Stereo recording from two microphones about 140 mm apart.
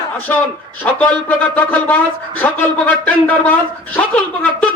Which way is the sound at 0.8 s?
15° left (ahead or behind).